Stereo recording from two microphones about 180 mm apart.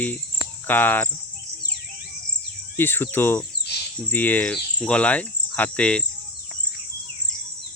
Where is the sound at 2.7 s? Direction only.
10° left (ahead or behind).